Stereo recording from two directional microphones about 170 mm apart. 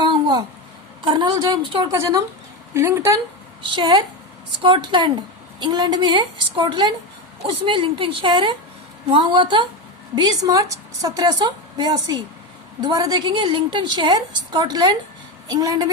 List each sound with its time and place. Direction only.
0.1 s a sound: 25° right (ahead or behind)
1.0 s a woman's voice: 25° right (ahead or behind)
3.7 s a woman's voice: 25° right (ahead or behind)